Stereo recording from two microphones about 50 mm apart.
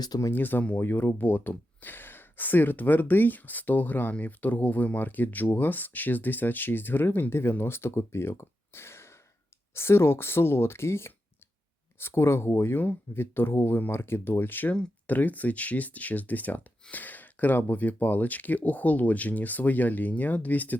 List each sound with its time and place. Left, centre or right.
0.3 s speech: left